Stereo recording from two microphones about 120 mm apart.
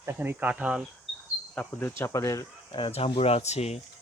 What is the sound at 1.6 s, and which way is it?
Speech, 10° left (ahead or behind).